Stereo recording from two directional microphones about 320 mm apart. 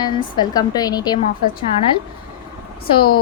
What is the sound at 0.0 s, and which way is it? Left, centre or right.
A woman's voice, centre.